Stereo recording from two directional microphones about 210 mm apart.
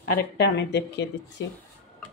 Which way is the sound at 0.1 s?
55° left (ahead or behind).